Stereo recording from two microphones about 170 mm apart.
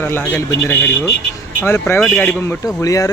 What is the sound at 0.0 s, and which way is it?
Speech, 10° left (ahead or behind).